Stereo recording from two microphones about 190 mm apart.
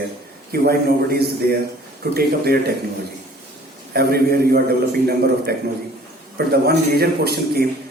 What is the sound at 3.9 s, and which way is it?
A man's voice, 55° right (ahead or behind).